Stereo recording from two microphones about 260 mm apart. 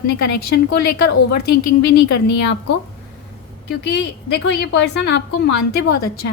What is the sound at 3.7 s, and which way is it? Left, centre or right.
A woman's voice, left.